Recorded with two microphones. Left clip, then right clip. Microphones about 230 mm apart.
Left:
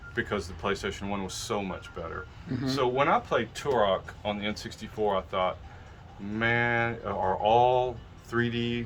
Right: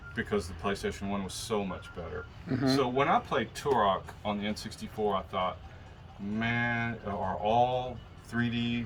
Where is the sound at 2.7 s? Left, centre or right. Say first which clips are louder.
Left 3 dB; centre.